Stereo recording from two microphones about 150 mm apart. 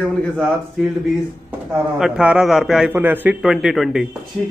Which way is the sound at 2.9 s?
15° right (ahead or behind).